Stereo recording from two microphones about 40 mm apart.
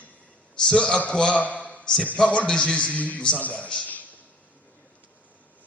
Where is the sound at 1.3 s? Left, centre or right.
Left.